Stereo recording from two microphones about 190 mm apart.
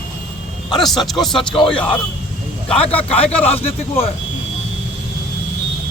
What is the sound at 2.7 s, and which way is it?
Speech, 5° left (ahead or behind).